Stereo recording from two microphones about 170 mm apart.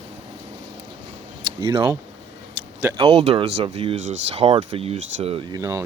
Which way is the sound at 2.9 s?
35° right (ahead or behind).